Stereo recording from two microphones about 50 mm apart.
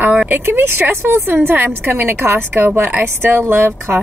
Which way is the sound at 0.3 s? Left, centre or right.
Right.